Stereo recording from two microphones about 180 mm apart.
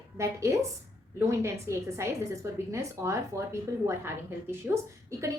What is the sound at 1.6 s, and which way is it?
A woman's voice, 15° right (ahead or behind).